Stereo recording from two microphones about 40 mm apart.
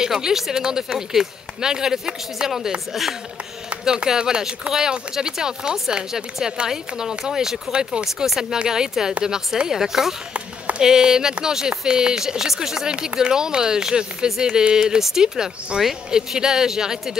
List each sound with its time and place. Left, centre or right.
0.0 s speech: centre